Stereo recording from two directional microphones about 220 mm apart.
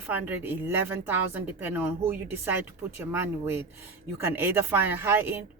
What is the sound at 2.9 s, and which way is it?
A woman's voice, 10° right (ahead or behind).